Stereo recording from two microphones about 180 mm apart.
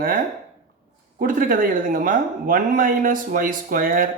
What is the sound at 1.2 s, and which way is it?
A man's voice, 50° right (ahead or behind).